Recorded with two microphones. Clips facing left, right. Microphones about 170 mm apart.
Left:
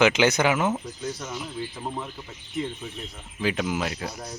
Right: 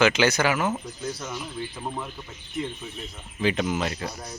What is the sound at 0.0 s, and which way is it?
Speech, 20° left (ahead or behind).